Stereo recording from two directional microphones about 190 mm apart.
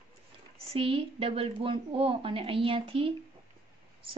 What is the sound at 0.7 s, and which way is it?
A woman's voice, 30° right (ahead or behind).